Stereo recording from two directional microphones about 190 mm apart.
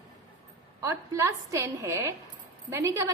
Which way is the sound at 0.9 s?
15° right (ahead or behind).